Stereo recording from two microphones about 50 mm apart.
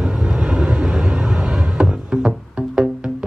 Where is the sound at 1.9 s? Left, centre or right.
Centre.